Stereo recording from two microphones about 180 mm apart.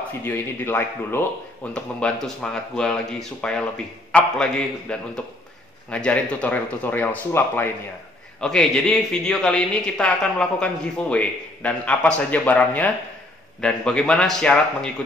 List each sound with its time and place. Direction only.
0.2 s a man's voice: 10° left (ahead or behind)